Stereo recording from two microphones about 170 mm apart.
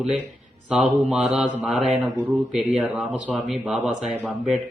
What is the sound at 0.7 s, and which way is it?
Speech, centre (ahead or behind).